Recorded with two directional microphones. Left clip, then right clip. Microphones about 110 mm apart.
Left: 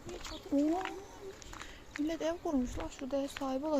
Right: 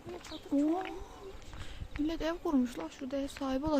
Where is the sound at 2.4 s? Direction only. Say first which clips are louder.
Right 3 dB; 45° right (ahead or behind).